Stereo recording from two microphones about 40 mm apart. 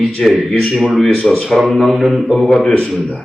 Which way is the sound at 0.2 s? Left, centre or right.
Centre.